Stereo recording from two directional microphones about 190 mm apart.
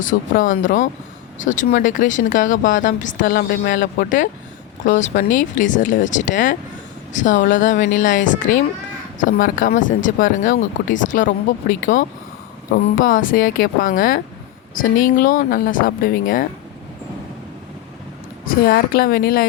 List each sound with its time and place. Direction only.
0.0 s speech: 45° left (ahead or behind)
18.4 s speech: 50° left (ahead or behind)